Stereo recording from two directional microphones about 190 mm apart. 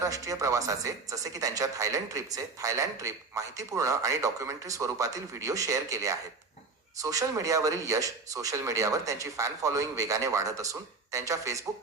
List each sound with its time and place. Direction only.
0.0 s speech: 15° right (ahead or behind)